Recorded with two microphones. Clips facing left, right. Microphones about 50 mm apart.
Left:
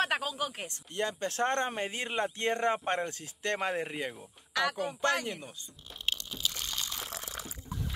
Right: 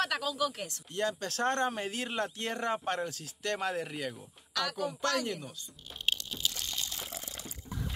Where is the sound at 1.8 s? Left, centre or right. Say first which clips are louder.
Left 2 dB; centre.